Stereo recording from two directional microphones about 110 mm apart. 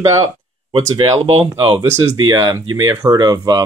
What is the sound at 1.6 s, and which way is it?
Speech, 50° right (ahead or behind).